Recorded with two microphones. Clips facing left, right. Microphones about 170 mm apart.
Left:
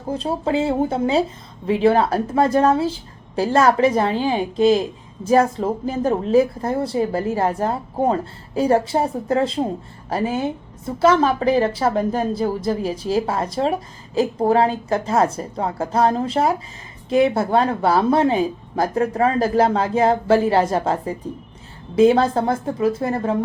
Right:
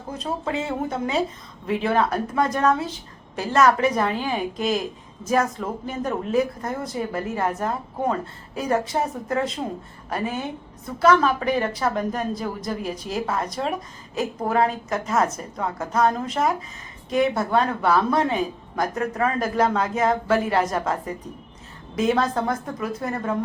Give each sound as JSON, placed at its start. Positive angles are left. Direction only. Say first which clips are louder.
{"t": 0.1, "sound": "a woman's voice", "louder": "left 6 dB", "side_deg": 30}